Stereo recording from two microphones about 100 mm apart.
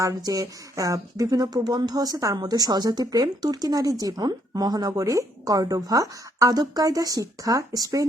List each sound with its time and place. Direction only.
0.0 s speech: 35° right (ahead or behind)